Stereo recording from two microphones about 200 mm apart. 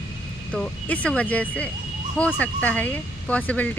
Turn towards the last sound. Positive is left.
turn(degrees=5)  # may be behind; listen again after turning